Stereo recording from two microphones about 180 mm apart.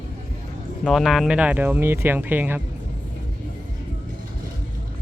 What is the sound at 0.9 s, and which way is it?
Speech, centre (ahead or behind).